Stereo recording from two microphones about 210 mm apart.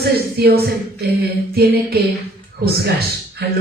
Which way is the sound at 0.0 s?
50° right (ahead or behind).